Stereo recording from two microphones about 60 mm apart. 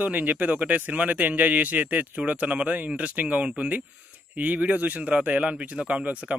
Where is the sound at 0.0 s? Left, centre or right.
Right.